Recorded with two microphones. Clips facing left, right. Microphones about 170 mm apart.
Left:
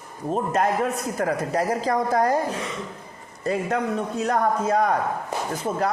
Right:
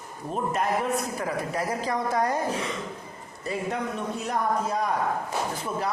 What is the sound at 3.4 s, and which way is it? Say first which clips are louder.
Speech: left 5 dB; 45° left (ahead or behind).